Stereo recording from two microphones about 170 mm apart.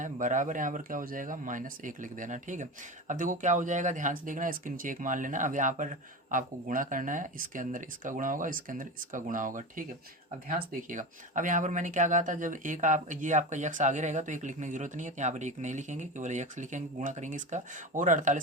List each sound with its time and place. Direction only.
0.0 s speech: 50° right (ahead or behind)